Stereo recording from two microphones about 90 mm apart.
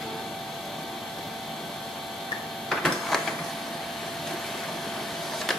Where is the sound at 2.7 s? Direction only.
5° left (ahead or behind).